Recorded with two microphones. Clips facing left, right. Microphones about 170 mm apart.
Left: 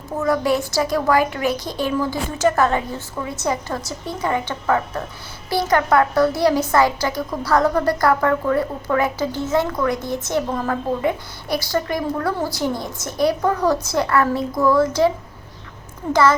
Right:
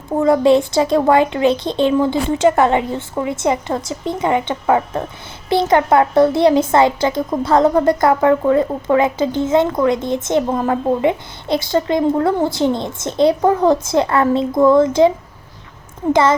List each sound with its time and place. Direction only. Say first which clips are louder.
0.2 s a woman's voice: right 7 dB; 25° right (ahead or behind)